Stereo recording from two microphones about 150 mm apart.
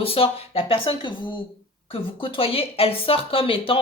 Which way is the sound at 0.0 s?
40° left (ahead or behind).